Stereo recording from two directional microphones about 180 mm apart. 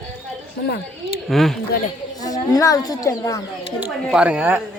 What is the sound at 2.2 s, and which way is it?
Speech, 20° left (ahead or behind).